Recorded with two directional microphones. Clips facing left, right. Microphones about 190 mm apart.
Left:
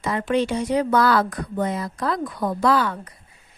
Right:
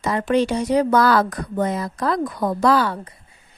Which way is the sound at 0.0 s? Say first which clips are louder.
Right 3 dB; 40° right (ahead or behind).